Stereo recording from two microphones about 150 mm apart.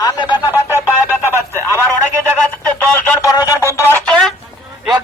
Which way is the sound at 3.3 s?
25° left (ahead or behind).